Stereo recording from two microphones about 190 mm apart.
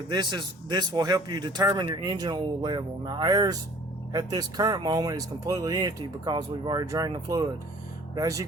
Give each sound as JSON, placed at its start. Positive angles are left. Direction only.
{"t": 0.1, "sound": "speech", "side_deg": -25}